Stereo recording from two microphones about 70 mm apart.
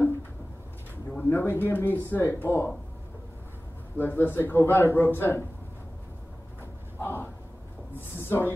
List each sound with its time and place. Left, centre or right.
1.1 s a man's voice: left
3.9 s a man's voice: left
7.0 s a sound: left
7.9 s speech: left